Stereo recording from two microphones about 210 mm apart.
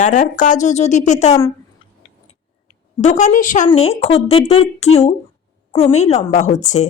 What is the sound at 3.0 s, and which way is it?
Speech, 35° left (ahead or behind).